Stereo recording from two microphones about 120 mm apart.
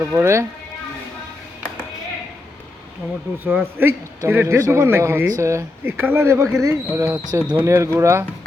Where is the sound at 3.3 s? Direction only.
15° right (ahead or behind).